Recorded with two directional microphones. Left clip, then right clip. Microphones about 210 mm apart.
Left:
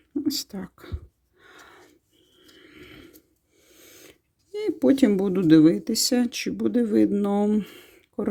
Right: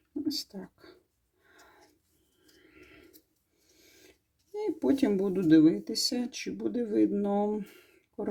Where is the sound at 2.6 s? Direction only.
35° left (ahead or behind).